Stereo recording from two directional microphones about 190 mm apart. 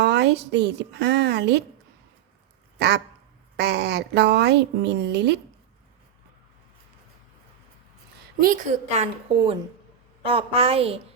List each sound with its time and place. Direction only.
0.0 s a woman's voice: 65° right (ahead or behind)
2.7 s a woman's voice: 60° right (ahead or behind)
8.4 s a woman's voice: 45° right (ahead or behind)
10.2 s a woman's voice: 30° right (ahead or behind)